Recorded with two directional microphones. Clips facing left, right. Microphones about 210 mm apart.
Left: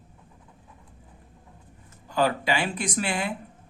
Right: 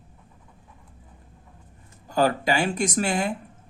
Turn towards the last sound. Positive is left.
turn(degrees=-45)  # may be behind; listen again after turning